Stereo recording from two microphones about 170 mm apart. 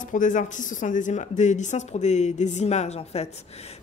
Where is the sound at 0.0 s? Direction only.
50° left (ahead or behind).